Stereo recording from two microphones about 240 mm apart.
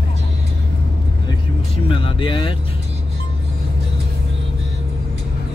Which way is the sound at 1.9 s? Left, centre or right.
Left.